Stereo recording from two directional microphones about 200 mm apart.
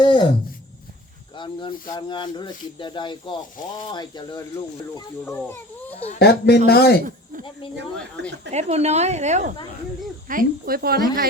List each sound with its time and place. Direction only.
0.0 s speech: 25° left (ahead or behind)
1.4 s a child's voice: 25° left (ahead or behind)
6.1 s speech: 55° left (ahead or behind)
8.4 s speech: 35° right (ahead or behind)
10.2 s speech: 45° right (ahead or behind)